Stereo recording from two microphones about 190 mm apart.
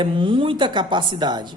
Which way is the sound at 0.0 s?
25° right (ahead or behind).